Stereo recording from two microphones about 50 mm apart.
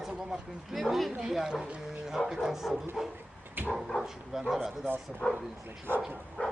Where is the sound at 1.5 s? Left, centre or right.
Right.